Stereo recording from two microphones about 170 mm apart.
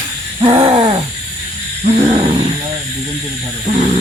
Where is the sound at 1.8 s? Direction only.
45° right (ahead or behind).